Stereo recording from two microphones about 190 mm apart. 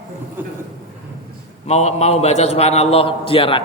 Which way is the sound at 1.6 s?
35° left (ahead or behind).